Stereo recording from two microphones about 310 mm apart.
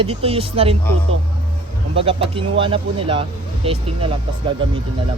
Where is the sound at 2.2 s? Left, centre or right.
Centre.